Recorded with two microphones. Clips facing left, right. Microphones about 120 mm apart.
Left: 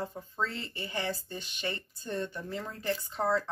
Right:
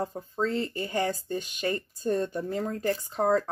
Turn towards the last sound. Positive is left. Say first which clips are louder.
# right 5 dB
turn(degrees=-45)  # may be behind; listen again after turning